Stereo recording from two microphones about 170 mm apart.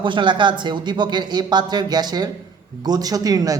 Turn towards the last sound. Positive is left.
turn(degrees=-20)  # may be behind; listen again after turning